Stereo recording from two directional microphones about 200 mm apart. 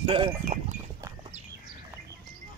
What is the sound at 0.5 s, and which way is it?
Speech, 35° right (ahead or behind).